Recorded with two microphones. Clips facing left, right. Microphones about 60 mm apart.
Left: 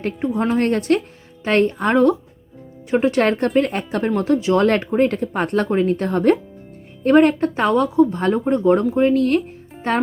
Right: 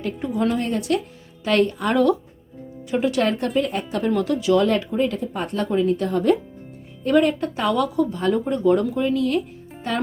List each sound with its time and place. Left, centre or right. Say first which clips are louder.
0.5 s speech: left 5 dB; left
1.5 s speech: left 3 dB; left
4.2 s speech: left 2 dB; left
4.6 s speech: left 4 dB; left
9.0 s speech: left 4 dB; left